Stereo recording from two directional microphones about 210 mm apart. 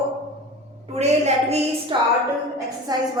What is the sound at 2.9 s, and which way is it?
Speech, 20° right (ahead or behind).